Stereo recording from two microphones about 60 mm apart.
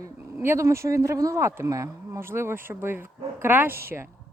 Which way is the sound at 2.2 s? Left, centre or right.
Right.